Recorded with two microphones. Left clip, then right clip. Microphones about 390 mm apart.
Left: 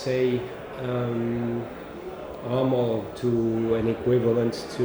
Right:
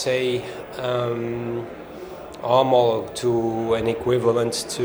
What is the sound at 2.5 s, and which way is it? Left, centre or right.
Speech, right.